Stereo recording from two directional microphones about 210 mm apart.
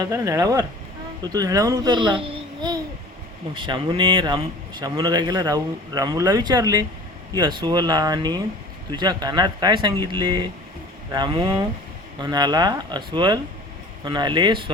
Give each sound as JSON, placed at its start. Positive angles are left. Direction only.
{"t": 0.0, "sound": "speech", "side_deg": -15}